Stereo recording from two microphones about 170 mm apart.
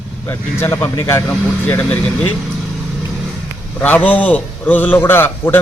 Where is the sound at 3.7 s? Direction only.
10° left (ahead or behind).